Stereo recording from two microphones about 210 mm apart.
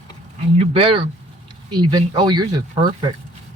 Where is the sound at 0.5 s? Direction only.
25° right (ahead or behind).